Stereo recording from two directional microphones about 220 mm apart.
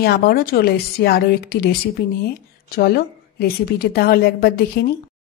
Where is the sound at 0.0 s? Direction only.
45° left (ahead or behind).